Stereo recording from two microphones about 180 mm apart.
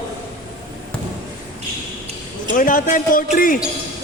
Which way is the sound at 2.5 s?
50° left (ahead or behind).